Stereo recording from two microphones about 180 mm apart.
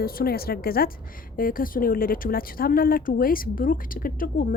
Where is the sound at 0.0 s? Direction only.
55° left (ahead or behind).